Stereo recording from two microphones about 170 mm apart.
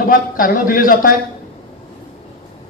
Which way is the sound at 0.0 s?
55° left (ahead or behind).